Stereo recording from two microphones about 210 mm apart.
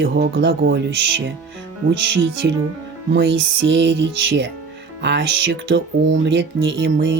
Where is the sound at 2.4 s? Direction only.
55° right (ahead or behind).